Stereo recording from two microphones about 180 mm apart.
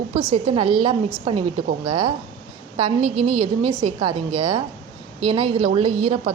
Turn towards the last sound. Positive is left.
turn(degrees=-30)  # may be behind; listen again after turning